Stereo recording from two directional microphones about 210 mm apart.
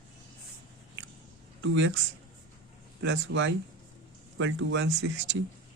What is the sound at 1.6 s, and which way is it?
Speech, 60° right (ahead or behind).